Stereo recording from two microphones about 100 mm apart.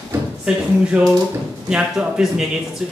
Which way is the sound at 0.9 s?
15° right (ahead or behind).